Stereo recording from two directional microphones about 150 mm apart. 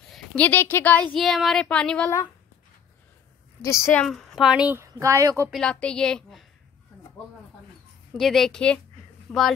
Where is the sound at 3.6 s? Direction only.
20° left (ahead or behind).